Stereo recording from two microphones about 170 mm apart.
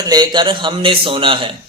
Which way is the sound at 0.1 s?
25° right (ahead or behind).